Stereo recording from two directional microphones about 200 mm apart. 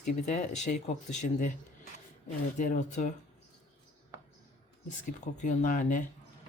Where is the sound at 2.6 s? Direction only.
40° left (ahead or behind).